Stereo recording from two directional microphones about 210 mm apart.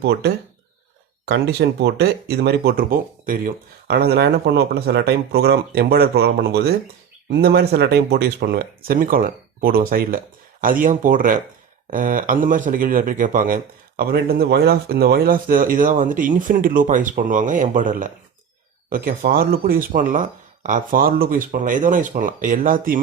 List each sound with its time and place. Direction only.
0.0 s speech: 50° right (ahead or behind)
1.3 s speech: 50° right (ahead or behind)